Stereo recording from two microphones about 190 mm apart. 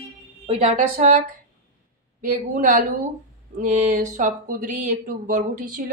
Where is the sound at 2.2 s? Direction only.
40° right (ahead or behind).